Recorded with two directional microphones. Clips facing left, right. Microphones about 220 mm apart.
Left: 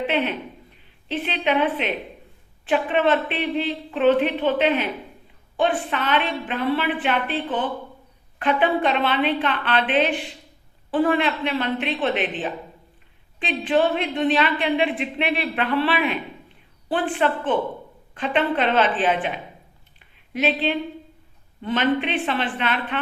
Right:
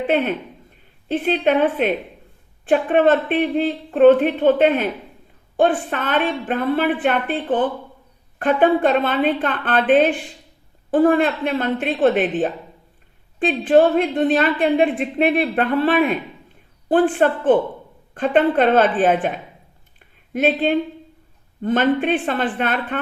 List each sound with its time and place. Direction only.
1.0 s speech: 50° right (ahead or behind)
20.3 s speech: 50° right (ahead or behind)